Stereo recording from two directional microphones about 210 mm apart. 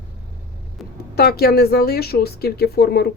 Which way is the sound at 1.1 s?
50° left (ahead or behind).